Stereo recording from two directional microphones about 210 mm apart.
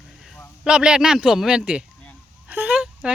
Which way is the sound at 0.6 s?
5° right (ahead or behind).